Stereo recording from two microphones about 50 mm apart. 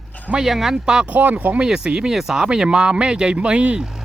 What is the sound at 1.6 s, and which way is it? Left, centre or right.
Speech, centre.